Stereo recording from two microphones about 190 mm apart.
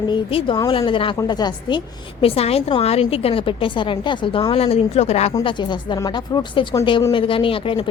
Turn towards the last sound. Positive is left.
turn(degrees=30)  # may be behind; listen again after turning